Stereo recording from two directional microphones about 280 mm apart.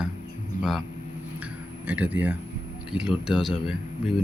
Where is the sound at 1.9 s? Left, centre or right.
Centre.